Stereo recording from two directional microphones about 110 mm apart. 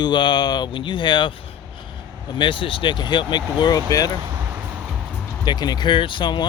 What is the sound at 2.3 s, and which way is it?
Speech, 50° left (ahead or behind).